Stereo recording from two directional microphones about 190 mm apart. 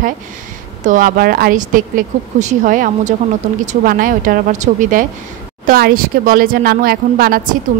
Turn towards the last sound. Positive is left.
turn(degrees=-50)  # may be behind; listen again after turning